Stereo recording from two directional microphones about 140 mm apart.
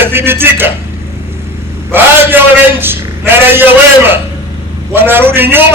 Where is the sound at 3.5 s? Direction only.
15° right (ahead or behind).